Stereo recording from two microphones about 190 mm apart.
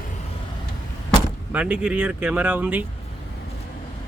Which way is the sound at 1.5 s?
5° right (ahead or behind).